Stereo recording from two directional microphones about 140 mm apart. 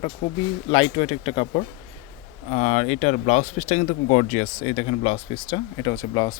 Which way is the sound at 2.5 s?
55° left (ahead or behind).